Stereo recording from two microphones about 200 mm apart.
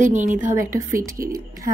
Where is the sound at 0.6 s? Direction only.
15° right (ahead or behind).